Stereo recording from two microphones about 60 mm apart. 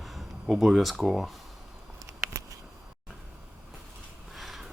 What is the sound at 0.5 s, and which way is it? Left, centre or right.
Speech, centre.